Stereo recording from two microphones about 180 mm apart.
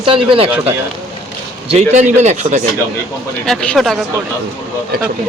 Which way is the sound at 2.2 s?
40° right (ahead or behind).